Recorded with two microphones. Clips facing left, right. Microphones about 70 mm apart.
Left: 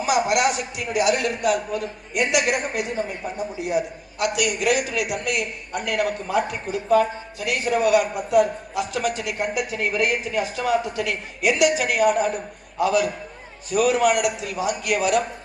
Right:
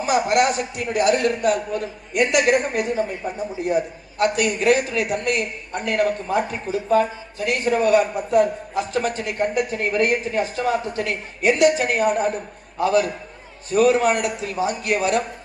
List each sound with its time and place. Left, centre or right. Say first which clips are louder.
0.0 s a man's voice: right 2 dB; right